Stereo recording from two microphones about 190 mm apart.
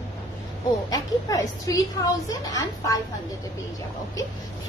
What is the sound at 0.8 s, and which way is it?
A woman's voice, 20° left (ahead or behind).